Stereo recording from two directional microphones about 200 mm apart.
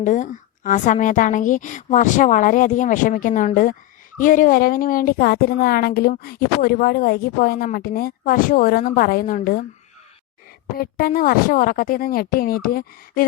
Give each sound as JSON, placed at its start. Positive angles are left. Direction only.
{"t": 0.0, "sound": "a woman's voice", "side_deg": 40}
{"t": 10.8, "sound": "a woman's voice", "side_deg": 45}